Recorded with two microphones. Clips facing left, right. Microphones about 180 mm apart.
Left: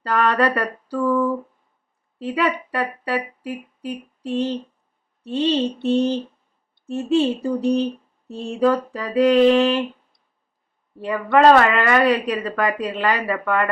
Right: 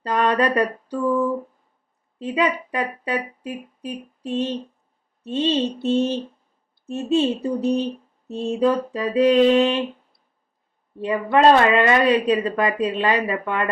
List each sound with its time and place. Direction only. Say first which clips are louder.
0.0 s a woman's voice: left 1 dB; 20° right (ahead or behind)
11.0 s a woman's voice: left 1 dB; 20° right (ahead or behind)